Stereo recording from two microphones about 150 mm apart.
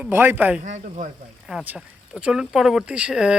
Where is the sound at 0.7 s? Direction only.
50° right (ahead or behind).